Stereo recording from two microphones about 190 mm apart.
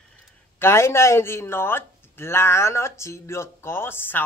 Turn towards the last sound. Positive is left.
turn(degrees=10)  # may be behind; listen again after turning